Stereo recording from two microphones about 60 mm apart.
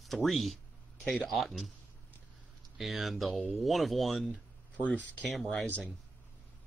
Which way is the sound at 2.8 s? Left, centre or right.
Centre.